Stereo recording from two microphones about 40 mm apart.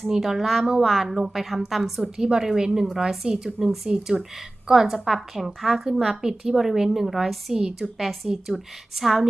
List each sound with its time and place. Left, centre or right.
0.1 s a woman's voice: centre
0.3 s a woman's voice: centre
0.6 s a woman's voice: centre
3.8 s a woman's voice: centre
7.5 s a woman's voice: centre
7.9 s a woman's voice: centre